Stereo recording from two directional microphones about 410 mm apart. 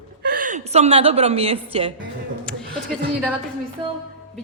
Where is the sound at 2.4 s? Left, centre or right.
Centre.